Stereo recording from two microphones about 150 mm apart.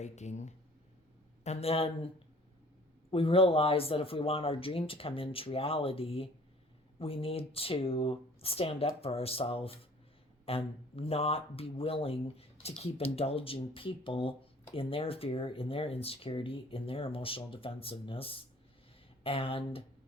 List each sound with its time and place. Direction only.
0.0 s speech: 50° left (ahead or behind)
3.1 s speech: 40° left (ahead or behind)